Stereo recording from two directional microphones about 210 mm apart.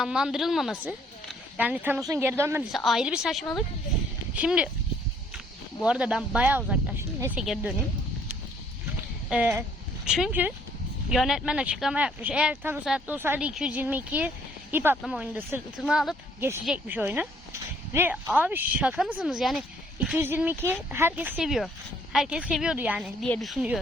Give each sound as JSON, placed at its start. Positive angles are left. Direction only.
{"t": 0.0, "sound": "speech", "side_deg": -5}
{"t": 2.7, "sound": "speech", "side_deg": 0}
{"t": 5.8, "sound": "speech", "side_deg": -5}
{"t": 9.3, "sound": "speech", "side_deg": -5}